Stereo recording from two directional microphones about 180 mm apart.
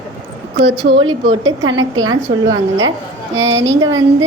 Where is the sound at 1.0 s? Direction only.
25° right (ahead or behind).